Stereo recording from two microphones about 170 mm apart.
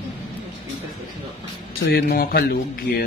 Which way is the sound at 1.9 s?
65° left (ahead or behind).